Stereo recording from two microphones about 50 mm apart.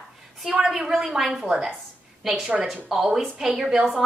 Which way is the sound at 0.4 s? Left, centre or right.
Centre.